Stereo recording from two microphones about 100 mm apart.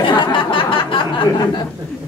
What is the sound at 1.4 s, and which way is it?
Speech, 45° left (ahead or behind).